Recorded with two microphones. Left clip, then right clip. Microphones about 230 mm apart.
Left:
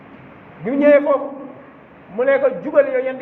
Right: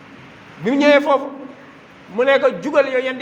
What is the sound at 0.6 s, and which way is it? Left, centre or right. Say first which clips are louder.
Speech: even; right.